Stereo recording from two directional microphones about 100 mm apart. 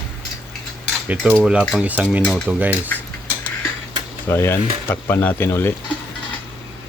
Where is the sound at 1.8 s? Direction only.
15° right (ahead or behind).